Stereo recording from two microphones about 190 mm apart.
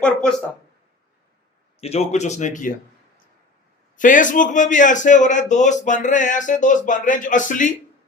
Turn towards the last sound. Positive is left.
turn(degrees=40)  # may be behind; listen again after turning